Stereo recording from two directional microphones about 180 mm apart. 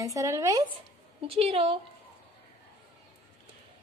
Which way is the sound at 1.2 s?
30° right (ahead or behind).